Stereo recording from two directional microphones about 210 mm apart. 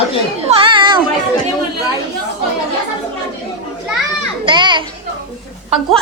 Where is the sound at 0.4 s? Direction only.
25° right (ahead or behind).